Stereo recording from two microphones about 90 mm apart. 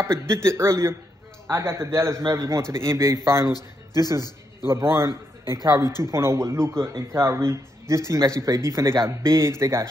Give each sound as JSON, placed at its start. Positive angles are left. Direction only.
{"t": 0.0, "sound": "speech", "side_deg": -30}
{"t": 4.6, "sound": "speech", "side_deg": -30}
{"t": 6.0, "sound": "speech", "side_deg": -30}